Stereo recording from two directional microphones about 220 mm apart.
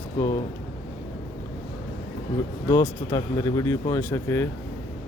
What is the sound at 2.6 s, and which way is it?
Speech, 15° left (ahead or behind).